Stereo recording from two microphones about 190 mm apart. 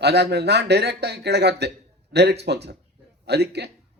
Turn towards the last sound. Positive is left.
turn(degrees=-60)  # may be behind; listen again after turning